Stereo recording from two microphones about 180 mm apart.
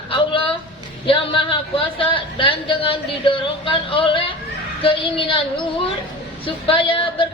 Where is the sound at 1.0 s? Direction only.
30° left (ahead or behind).